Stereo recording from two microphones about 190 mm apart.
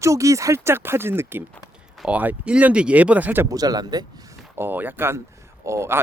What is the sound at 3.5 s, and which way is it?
Speech, 20° right (ahead or behind).